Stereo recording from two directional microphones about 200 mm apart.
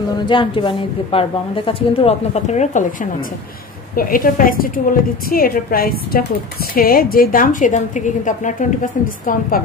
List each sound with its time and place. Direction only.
0.3 s a woman's voice: 25° left (ahead or behind); by 9.6 s 40° left (ahead or behind)